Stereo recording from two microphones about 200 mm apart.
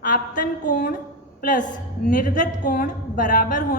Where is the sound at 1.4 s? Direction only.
40° left (ahead or behind).